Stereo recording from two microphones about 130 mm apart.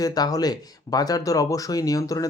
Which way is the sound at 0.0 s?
30° left (ahead or behind).